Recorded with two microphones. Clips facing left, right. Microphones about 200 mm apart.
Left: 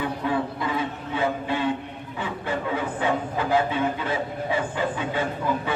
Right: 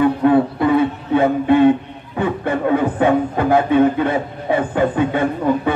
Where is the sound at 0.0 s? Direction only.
60° right (ahead or behind).